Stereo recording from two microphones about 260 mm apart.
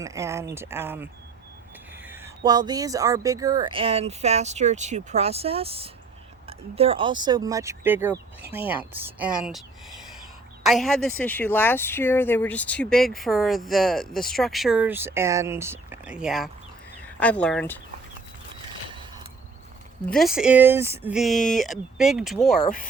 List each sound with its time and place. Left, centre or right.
0.0 s a woman's voice: centre
20.1 s a woman's voice: centre